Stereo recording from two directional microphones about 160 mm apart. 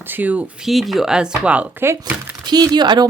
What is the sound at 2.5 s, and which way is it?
Speech, 25° right (ahead or behind).